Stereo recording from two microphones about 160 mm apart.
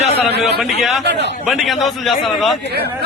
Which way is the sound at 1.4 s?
Centre (ahead or behind).